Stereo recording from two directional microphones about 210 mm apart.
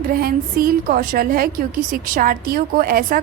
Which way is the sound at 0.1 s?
45° right (ahead or behind).